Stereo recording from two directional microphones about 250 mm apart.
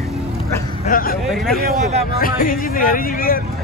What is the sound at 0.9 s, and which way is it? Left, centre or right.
Speech, left.